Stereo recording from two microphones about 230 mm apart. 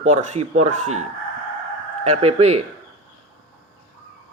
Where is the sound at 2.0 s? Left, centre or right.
Right.